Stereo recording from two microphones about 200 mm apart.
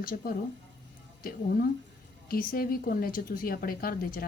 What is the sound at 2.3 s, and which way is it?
A woman's voice, 45° left (ahead or behind).